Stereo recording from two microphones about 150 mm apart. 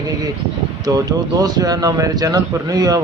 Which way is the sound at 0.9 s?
25° right (ahead or behind).